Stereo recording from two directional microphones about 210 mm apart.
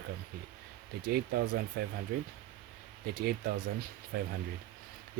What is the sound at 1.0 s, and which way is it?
Speech, 45° right (ahead or behind).